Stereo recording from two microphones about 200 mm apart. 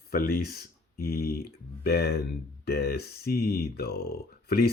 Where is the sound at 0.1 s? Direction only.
50° left (ahead or behind).